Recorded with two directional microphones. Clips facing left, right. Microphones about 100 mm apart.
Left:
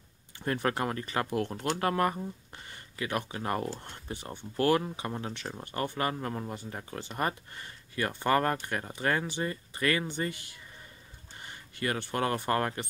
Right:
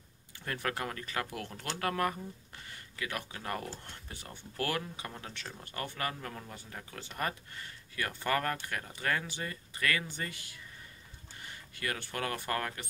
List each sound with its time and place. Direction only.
0.4 s speech: 30° left (ahead or behind)
11.8 s speech: 30° left (ahead or behind)